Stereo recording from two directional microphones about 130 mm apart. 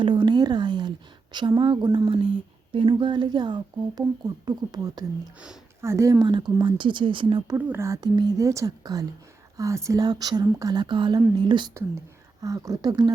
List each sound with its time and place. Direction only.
0.0 s a sound: 40° right (ahead or behind)
2.7 s speech: 35° right (ahead or behind)
7.6 s speech: 20° right (ahead or behind); by 11.7 s 40° right (ahead or behind)
12.4 s speech: 25° right (ahead or behind)